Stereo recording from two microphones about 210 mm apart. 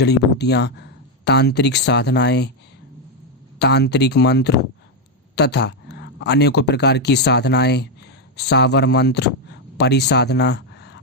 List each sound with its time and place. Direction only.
0.0 s speech: 55° left (ahead or behind)
3.6 s speech: 50° left (ahead or behind)